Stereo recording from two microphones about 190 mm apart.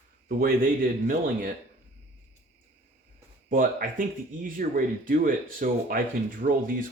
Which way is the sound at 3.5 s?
45° right (ahead or behind).